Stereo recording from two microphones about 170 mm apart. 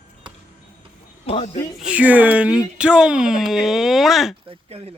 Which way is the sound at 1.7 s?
5° right (ahead or behind).